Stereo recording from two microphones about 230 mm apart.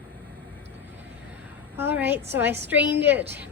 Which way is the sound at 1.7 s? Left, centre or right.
Centre.